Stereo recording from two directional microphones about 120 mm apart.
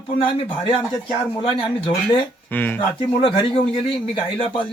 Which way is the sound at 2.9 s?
45° left (ahead or behind).